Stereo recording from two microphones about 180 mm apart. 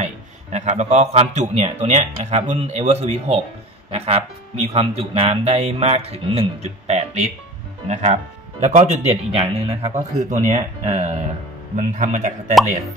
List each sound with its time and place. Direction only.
0.0 s a man's voice: 40° right (ahead or behind)